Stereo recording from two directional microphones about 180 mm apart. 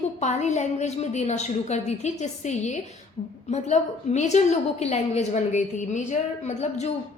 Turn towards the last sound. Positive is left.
turn(degrees=40)  # may be behind; listen again after turning